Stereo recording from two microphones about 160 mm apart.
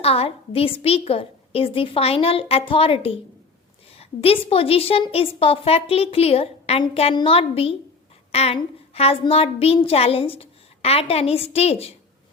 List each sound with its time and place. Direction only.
0.0 s a woman's voice: 40° left (ahead or behind)